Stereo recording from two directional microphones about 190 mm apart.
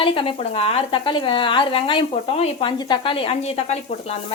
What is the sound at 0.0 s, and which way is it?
Speech, 25° left (ahead or behind).